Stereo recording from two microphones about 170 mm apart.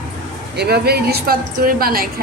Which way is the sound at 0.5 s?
70° right (ahead or behind).